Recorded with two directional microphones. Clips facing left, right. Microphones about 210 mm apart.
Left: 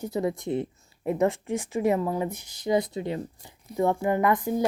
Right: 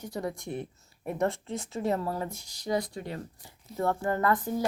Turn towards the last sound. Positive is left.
turn(degrees=15)  # may be behind; listen again after turning